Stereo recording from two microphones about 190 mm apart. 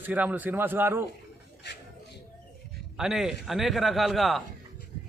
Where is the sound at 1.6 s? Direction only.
65° left (ahead or behind).